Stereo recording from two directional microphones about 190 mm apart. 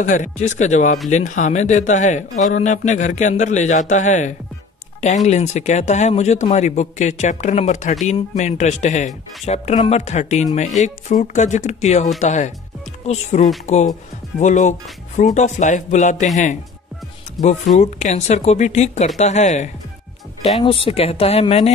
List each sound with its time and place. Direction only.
0.0 s a man's voice: 40° left (ahead or behind)
17.4 s a man's voice: 40° left (ahead or behind)